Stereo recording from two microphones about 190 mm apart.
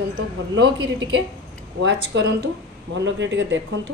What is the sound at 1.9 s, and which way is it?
A woman's voice, 65° right (ahead or behind).